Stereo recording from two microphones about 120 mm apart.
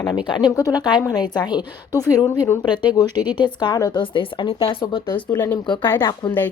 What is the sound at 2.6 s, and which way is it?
A woman's voice, 35° left (ahead or behind).